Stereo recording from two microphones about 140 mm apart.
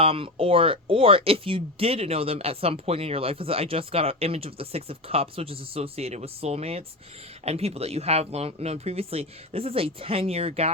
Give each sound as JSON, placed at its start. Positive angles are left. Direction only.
{"t": 0.0, "sound": "speech", "side_deg": -40}